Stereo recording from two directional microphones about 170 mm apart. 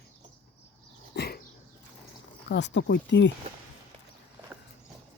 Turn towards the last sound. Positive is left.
turn(degrees=90)